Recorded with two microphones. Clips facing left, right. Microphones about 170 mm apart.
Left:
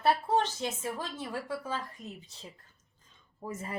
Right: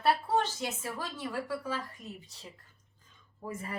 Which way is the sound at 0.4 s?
20° left (ahead or behind).